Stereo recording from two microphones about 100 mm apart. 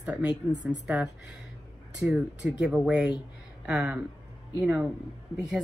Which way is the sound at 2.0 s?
10° right (ahead or behind).